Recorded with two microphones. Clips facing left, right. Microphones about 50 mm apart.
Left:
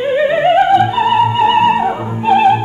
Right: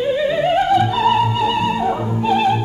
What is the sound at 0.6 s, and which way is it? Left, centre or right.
Music, centre.